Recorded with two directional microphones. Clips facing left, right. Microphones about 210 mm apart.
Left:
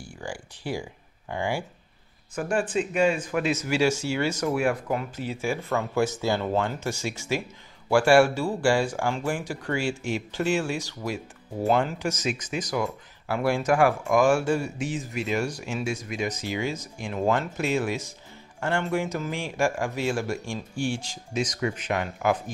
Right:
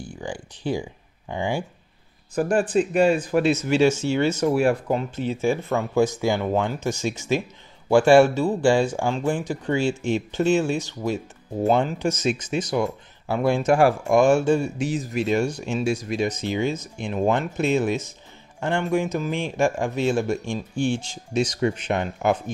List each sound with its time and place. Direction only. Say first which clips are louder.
0.0 s speech: right 4 dB; 20° right (ahead or behind)
2.3 s speech: right 5 dB; 35° right (ahead or behind)
14.8 s speech: right 5 dB; 35° right (ahead or behind)